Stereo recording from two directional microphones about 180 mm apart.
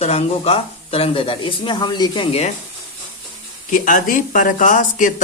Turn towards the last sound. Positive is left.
turn(degrees=45)  # may be behind; listen again after turning